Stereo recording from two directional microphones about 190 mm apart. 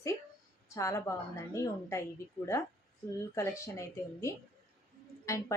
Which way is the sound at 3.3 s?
15° left (ahead or behind).